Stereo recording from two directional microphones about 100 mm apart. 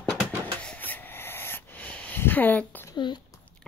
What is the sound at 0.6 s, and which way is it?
Rub, 15° left (ahead or behind).